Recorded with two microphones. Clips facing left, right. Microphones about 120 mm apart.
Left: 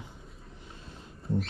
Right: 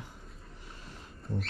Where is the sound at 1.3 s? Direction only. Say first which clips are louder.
Left 6 dB; centre (ahead or behind).